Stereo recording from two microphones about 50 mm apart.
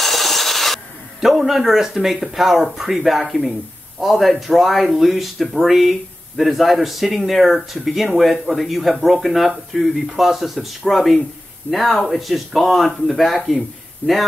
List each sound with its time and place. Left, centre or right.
0.0 s rub: centre
1.2 s speech: centre
14.0 s speech: left